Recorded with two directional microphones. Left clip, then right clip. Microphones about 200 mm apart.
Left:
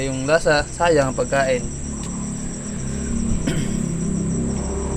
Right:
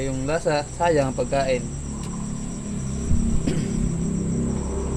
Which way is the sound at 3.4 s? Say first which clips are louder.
Left 2 dB; 15° right (ahead or behind).